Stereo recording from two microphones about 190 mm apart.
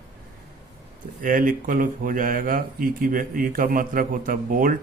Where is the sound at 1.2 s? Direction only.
45° right (ahead or behind).